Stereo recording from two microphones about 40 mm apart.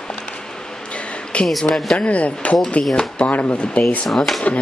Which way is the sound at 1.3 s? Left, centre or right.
Left.